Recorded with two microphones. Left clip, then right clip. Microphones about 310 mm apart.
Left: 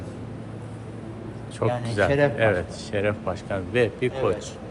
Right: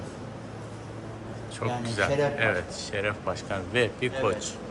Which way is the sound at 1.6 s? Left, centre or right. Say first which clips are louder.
Left 5 dB; centre.